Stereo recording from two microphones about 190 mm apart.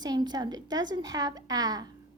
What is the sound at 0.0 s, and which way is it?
A child's voice, 20° right (ahead or behind).